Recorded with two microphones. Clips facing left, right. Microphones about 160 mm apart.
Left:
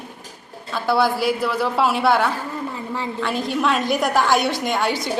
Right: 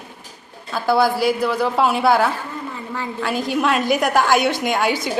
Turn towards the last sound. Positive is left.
turn(degrees=0)  # may be behind; listen again after turning